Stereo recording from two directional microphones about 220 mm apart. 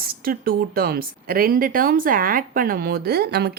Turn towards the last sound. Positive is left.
turn(degrees=-45)  # may be behind; listen again after turning